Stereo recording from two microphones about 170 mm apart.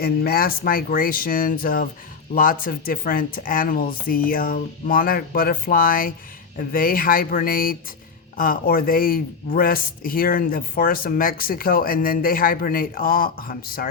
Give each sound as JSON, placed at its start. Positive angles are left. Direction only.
{"t": 0.0, "sound": "speech", "side_deg": 60}